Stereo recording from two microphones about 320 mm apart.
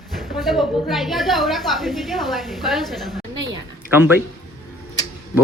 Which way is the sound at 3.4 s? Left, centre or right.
Centre.